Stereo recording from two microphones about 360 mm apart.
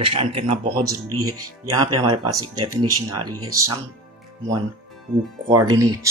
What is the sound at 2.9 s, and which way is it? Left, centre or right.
Speech, right.